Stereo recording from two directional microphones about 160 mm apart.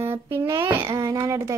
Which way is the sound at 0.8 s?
20° right (ahead or behind).